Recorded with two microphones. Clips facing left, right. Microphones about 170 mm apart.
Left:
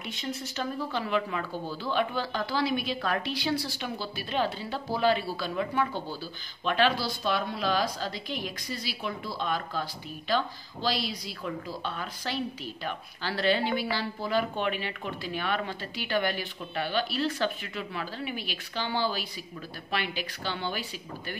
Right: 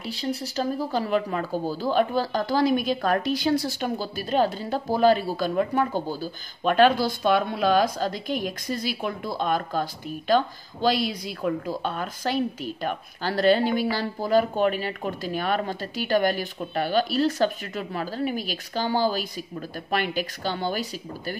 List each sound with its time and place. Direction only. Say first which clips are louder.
0.0 s speech: right 6 dB; 35° right (ahead or behind)